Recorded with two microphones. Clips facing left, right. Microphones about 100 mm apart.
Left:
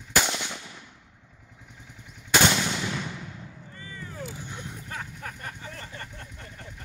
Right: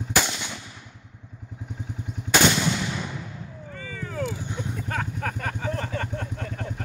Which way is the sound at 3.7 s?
90° right.